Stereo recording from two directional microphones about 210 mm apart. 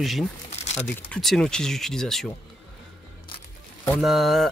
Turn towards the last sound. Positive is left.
turn(degrees=0)  # may be behind; listen again after turning